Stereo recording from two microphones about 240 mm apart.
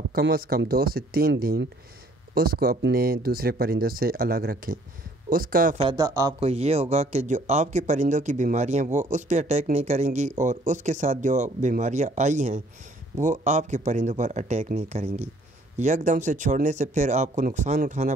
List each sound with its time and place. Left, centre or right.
0.1 s speech: right
5.8 s speech: centre
6.4 s speech: right